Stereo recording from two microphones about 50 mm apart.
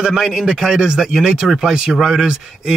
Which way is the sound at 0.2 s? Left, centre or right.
Centre.